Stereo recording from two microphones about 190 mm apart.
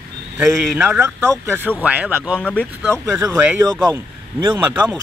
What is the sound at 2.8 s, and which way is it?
Speech, 15° right (ahead or behind).